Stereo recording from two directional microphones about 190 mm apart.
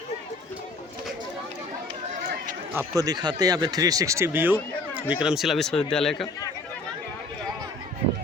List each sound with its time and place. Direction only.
2.7 s speech: 20° right (ahead or behind); by 6.2 s centre (ahead or behind)